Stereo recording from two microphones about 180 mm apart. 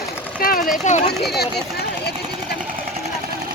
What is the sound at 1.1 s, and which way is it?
Speech, 60° left (ahead or behind).